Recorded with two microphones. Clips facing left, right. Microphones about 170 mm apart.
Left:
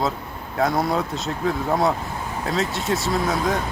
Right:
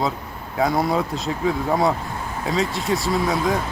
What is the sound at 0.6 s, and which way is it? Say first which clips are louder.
Speech: right 1 dB; centre (ahead or behind).